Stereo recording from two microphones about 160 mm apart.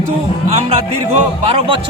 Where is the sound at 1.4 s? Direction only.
40° right (ahead or behind).